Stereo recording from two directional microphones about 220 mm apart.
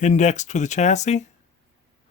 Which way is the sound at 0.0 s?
35° left (ahead or behind).